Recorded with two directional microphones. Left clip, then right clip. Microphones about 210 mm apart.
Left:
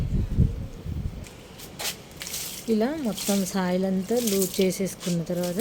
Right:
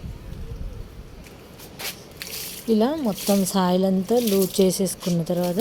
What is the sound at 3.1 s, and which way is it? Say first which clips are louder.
Speech: right 5 dB; centre (ahead or behind).